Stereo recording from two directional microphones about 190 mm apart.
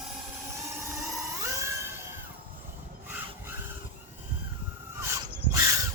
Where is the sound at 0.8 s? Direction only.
15° right (ahead or behind).